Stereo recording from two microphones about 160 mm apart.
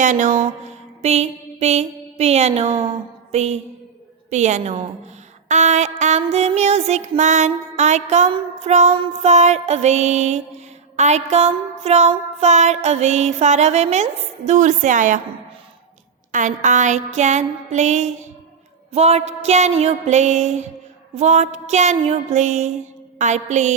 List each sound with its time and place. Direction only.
0.0 s music: 50° right (ahead or behind)
3.3 s a sound: 40° right (ahead or behind)
4.3 s music: 45° right (ahead or behind)
16.3 s music: 50° right (ahead or behind)